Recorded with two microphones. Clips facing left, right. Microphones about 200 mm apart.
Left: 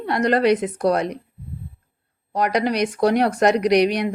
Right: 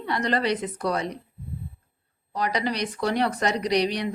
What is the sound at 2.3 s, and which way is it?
A woman's voice, 50° left (ahead or behind).